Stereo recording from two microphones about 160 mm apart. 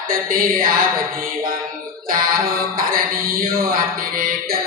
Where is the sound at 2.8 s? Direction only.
65° right (ahead or behind).